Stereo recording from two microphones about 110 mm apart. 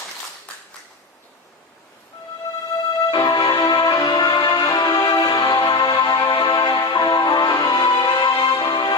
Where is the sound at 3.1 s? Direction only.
40° left (ahead or behind).